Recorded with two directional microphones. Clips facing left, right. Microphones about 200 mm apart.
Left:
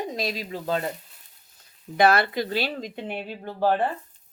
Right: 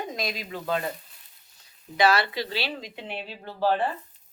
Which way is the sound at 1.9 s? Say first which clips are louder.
Left 3 dB; 55° left (ahead or behind).